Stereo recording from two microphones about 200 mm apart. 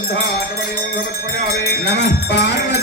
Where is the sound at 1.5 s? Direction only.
60° left (ahead or behind).